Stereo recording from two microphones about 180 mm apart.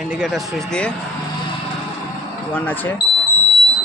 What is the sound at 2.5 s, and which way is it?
Speech, 10° left (ahead or behind).